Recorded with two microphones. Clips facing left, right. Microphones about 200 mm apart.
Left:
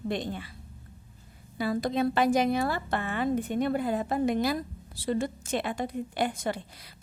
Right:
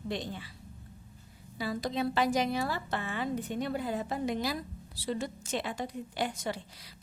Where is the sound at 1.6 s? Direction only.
55° left (ahead or behind).